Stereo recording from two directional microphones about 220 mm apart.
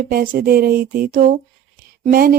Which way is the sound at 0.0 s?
40° right (ahead or behind).